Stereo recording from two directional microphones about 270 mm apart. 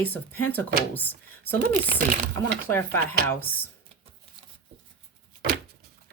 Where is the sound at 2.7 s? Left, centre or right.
Centre.